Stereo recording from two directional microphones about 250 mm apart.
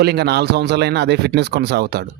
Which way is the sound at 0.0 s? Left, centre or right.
Right.